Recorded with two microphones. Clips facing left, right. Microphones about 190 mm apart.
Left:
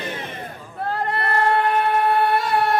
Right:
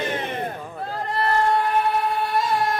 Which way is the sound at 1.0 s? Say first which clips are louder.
Right 1 dB; 60° left (ahead or behind).